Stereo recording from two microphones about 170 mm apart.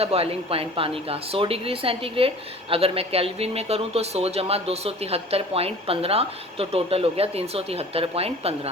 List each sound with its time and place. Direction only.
0.0 s speech: 35° right (ahead or behind)